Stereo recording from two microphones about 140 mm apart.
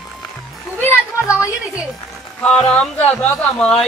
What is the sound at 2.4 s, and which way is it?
Speech, 10° left (ahead or behind).